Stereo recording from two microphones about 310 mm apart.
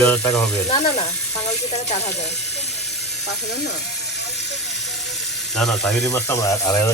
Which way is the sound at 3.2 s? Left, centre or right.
Left.